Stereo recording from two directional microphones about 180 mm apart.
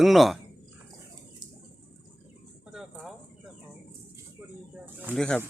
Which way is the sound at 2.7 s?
Centre (ahead or behind).